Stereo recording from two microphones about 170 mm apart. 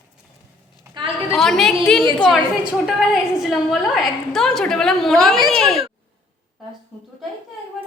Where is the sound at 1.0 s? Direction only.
25° right (ahead or behind).